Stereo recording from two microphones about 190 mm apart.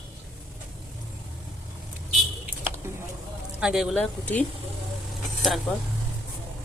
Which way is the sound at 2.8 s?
15° right (ahead or behind).